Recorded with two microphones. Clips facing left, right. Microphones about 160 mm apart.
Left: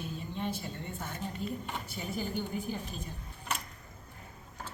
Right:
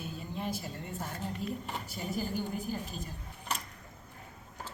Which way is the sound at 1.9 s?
40° right (ahead or behind).